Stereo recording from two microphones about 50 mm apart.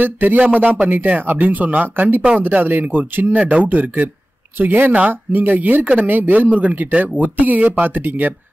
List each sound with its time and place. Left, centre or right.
0.0 s speech: right
4.9 s speech: right